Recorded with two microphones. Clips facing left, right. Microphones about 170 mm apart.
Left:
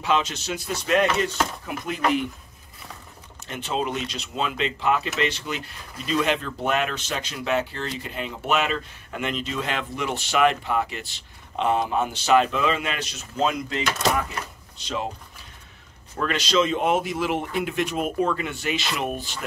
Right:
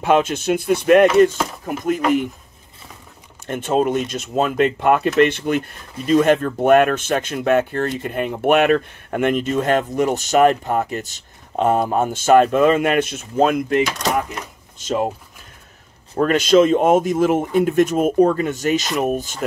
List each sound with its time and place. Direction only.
0.0 s speech: 50° right (ahead or behind)
3.4 s speech: 50° right (ahead or behind)
16.2 s speech: 50° right (ahead or behind)